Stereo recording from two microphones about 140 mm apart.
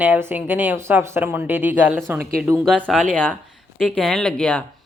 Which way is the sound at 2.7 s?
5° left (ahead or behind).